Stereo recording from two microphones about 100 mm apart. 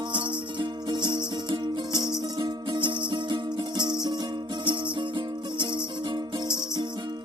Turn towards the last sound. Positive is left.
turn(degrees=-50)  # may be behind; listen again after turning